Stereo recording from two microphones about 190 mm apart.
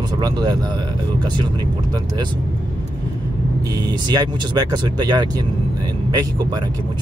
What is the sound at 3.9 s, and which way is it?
Speech, 20° right (ahead or behind).